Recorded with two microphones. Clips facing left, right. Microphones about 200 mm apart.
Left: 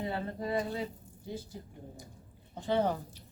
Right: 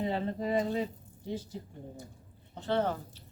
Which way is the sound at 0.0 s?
20° right (ahead or behind).